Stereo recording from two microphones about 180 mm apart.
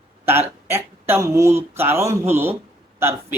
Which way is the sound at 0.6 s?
15° right (ahead or behind).